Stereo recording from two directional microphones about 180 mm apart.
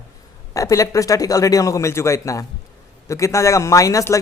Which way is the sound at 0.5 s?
20° left (ahead or behind).